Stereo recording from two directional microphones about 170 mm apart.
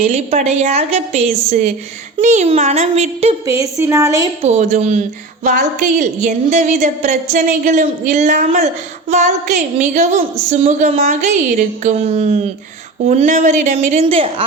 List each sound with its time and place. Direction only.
0.0 s a woman's voice: 40° right (ahead or behind)
3.4 s a woman's voice: 20° right (ahead or behind)
4.4 s a woman's voice: 40° right (ahead or behind)